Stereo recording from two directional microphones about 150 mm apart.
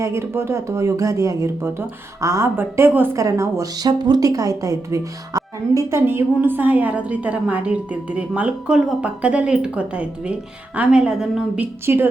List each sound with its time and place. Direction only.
0.0 s speech: 20° right (ahead or behind)